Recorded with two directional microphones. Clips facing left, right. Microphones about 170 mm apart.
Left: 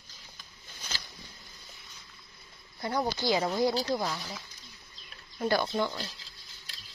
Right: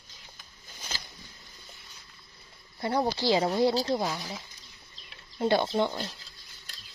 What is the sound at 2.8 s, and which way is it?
Speech, 25° right (ahead or behind).